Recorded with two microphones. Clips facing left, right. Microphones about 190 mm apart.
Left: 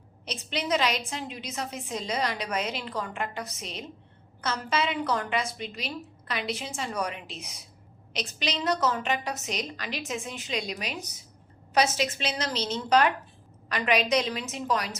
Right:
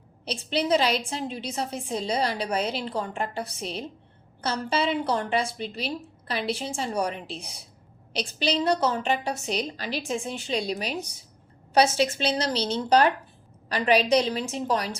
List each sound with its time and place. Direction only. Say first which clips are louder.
0.3 s a woman's voice: right 5 dB; 35° right (ahead or behind)